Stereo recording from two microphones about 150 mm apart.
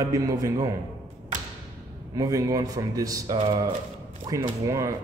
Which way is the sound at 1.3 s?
55° right (ahead or behind).